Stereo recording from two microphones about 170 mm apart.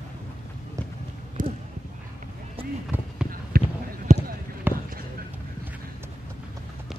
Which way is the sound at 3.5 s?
60° right (ahead or behind).